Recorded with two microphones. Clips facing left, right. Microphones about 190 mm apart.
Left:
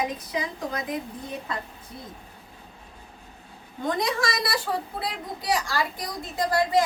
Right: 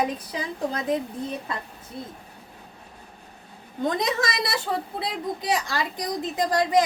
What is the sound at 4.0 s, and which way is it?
A woman's voice, 20° right (ahead or behind).